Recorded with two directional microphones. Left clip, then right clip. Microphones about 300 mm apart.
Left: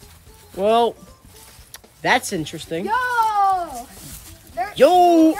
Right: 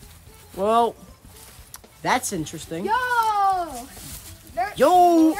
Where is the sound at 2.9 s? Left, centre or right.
Left.